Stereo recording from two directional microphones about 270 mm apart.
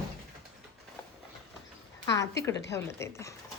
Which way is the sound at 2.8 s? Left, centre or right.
Centre.